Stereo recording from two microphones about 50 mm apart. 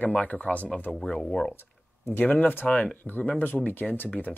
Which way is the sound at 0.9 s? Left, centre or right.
Centre.